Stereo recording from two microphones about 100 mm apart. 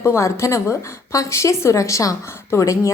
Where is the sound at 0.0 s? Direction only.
25° left (ahead or behind).